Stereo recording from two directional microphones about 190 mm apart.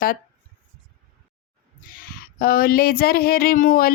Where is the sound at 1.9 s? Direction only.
50° left (ahead or behind).